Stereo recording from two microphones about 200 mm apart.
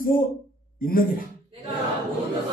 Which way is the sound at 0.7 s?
45° left (ahead or behind).